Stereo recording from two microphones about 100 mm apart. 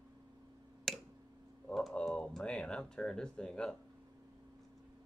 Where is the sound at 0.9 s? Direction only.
Centre (ahead or behind).